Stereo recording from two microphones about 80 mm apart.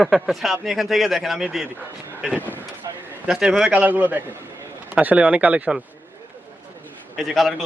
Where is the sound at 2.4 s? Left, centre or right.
Left.